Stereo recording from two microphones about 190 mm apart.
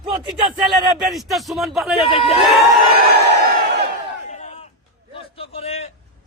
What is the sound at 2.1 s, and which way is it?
Speech, 25° left (ahead or behind).